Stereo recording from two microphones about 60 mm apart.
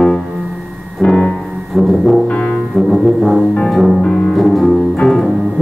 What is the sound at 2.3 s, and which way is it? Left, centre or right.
Music, centre.